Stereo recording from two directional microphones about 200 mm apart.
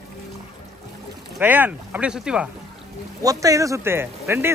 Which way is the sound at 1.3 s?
10° right (ahead or behind).